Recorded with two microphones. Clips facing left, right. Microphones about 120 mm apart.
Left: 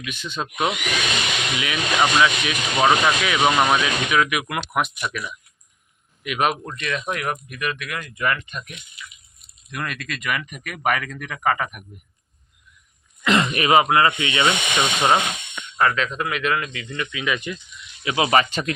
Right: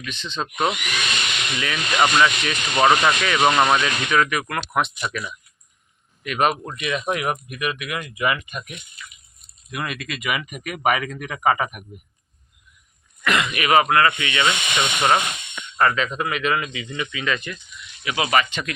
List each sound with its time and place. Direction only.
0.0 s speech: 10° left (ahead or behind)
6.7 s speech: 10° right (ahead or behind)
9.7 s speech: 5° right (ahead or behind)
13.2 s speech: 30° left (ahead or behind)
13.9 s speech: 20° left (ahead or behind)
15.8 s speech: centre (ahead or behind)
17.2 s speech: 15° left (ahead or behind)
18.0 s speech: 30° left (ahead or behind)